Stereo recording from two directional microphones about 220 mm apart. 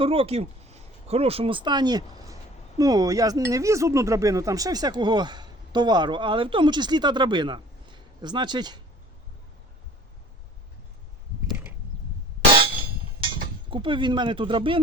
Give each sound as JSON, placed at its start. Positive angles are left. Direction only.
{"t": 0.0, "sound": "speech", "side_deg": -25}
{"t": 13.7, "sound": "speech", "side_deg": -25}